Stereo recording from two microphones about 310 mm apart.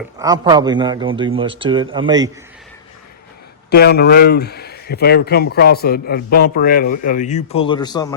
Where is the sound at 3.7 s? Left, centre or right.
Left.